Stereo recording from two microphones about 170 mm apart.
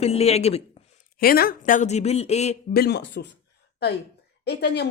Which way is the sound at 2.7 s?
75° left (ahead or behind).